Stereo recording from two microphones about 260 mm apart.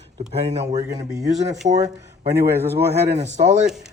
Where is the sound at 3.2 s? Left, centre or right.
Right.